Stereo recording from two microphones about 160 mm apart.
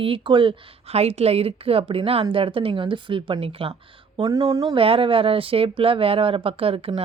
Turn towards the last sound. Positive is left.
turn(degrees=-35)  # may be behind; listen again after turning